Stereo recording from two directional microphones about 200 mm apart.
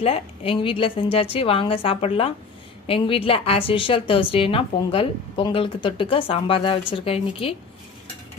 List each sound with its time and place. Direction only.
0.0 s a woman's voice: 30° left (ahead or behind)